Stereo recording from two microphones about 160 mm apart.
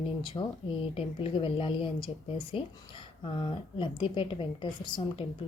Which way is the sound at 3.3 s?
30° left (ahead or behind).